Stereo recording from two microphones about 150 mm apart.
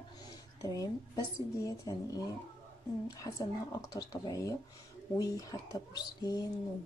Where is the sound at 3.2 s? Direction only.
25° left (ahead or behind).